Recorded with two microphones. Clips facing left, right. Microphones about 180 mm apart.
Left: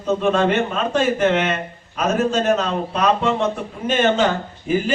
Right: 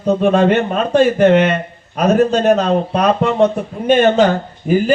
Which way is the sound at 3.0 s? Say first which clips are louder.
Right 4 dB; 60° right (ahead or behind).